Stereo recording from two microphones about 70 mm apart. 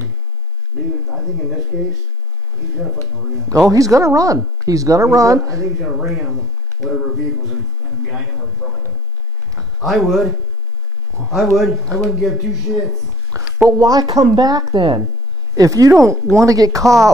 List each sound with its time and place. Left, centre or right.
1.7 s speech: centre
3.4 s speech: right
6.8 s speech: centre
9.6 s a man's voice: centre
13.3 s a sound: right
13.7 s speech: right
15.5 s speech: right
15.9 s speech: right
16.3 s speech: right